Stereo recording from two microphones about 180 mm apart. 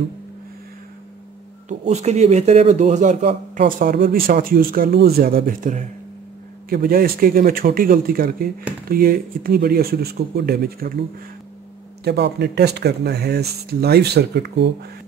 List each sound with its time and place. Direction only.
1.7 s a man's voice: 40° right (ahead or behind); by 10.9 s 60° right (ahead or behind)
12.0 s speech: 65° right (ahead or behind)